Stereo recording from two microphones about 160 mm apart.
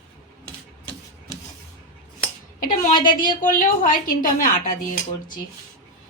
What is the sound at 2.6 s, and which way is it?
Speech, 60° left (ahead or behind).